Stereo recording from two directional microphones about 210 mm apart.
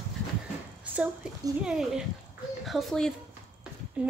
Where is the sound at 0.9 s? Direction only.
5° right (ahead or behind).